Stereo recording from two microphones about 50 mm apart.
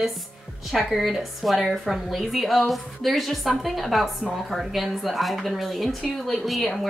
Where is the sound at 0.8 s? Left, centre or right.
Centre.